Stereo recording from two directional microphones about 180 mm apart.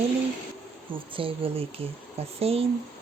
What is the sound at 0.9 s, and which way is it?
Speech, 30° right (ahead or behind).